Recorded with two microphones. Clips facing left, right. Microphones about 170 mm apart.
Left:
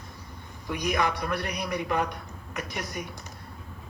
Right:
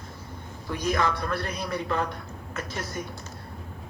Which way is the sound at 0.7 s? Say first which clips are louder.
Right 1 dB; 15° left (ahead or behind).